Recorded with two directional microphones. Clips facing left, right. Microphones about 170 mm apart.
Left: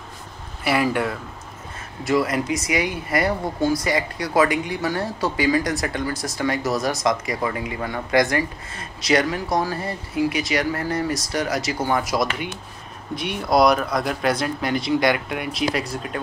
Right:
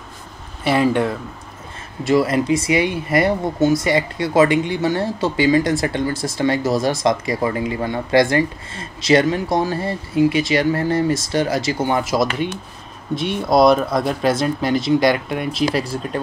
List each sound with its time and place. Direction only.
0.7 s speech: 25° right (ahead or behind)